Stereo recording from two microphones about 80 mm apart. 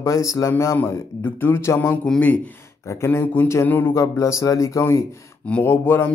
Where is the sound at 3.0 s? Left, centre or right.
Left.